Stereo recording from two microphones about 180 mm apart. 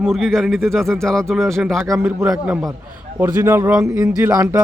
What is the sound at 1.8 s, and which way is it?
A man's voice, 15° right (ahead or behind).